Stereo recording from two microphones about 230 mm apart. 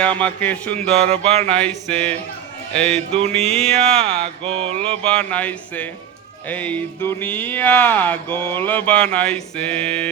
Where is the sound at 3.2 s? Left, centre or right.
Right.